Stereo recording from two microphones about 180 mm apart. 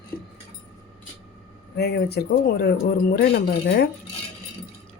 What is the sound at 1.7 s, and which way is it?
Speech, 65° left (ahead or behind).